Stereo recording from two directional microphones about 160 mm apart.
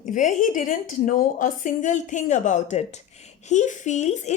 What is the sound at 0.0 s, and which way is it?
A woman's voice, 50° left (ahead or behind).